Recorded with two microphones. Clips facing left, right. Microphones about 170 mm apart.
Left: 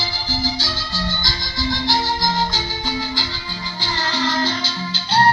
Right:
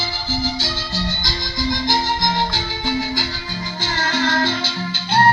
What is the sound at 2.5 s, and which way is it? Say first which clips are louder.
Music: right 2 dB; 55° right (ahead or behind).